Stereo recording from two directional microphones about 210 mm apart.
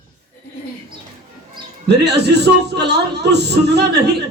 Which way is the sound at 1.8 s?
55° right (ahead or behind).